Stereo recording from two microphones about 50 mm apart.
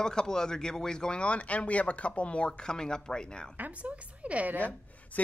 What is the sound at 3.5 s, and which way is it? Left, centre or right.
A woman's voice, right.